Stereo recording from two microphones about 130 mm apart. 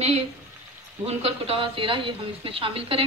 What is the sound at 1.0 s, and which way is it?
Speech, 50° right (ahead or behind).